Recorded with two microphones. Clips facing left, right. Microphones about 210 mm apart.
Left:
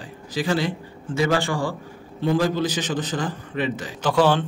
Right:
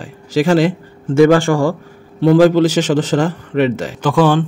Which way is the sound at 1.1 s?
50° right (ahead or behind).